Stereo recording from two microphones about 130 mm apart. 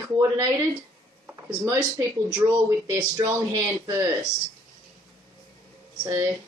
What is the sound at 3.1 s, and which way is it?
Speech, 25° right (ahead or behind).